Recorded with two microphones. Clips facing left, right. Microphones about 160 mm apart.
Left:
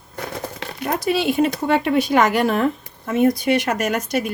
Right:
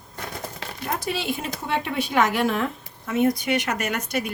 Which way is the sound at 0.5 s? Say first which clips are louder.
Left 6 dB; 70° left (ahead or behind).